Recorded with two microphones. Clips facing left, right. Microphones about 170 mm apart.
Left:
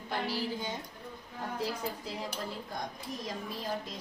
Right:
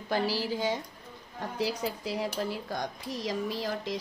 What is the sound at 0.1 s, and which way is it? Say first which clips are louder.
A woman's voice: right 5 dB; 90° right.